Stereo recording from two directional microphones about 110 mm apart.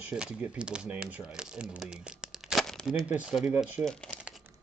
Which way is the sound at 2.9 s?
10° right (ahead or behind).